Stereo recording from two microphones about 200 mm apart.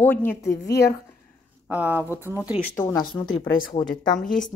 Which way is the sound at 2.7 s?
15° left (ahead or behind).